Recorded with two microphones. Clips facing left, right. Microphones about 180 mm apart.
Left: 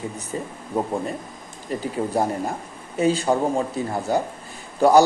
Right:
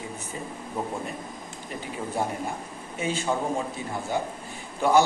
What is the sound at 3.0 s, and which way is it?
Speech, 35° left (ahead or behind).